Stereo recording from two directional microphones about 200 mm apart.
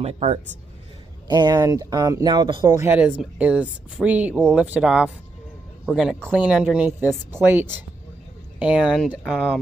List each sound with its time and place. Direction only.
0.0 s a man's voice: 30° right (ahead or behind)
1.2 s speech: 20° right (ahead or behind)
2.9 s speech: 10° right (ahead or behind)